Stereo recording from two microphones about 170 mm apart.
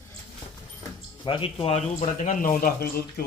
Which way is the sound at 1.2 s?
35° left (ahead or behind).